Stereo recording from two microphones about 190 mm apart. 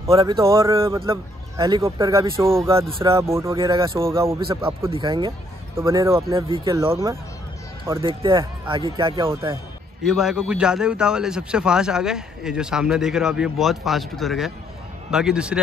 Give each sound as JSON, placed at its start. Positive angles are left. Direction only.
{"t": 0.1, "sound": "speech", "side_deg": -25}
{"t": 10.0, "sound": "a man's voice", "side_deg": -5}